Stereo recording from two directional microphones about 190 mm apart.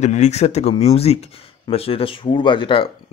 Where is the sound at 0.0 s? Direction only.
35° left (ahead or behind).